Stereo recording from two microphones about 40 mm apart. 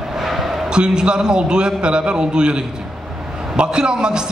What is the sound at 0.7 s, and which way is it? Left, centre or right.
A man's voice, right.